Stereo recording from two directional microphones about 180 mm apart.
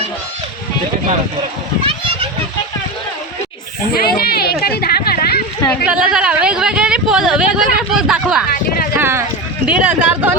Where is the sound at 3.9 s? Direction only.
55° left (ahead or behind).